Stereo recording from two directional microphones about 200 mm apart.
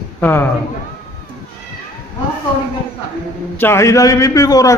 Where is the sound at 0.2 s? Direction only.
10° left (ahead or behind).